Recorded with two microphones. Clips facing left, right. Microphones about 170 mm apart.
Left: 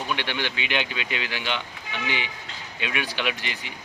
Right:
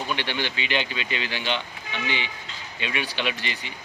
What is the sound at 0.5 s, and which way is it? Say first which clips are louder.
A man's voice: right 1 dB; 5° left (ahead or behind).